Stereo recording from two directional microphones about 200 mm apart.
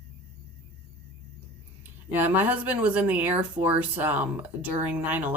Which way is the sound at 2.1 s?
10° right (ahead or behind).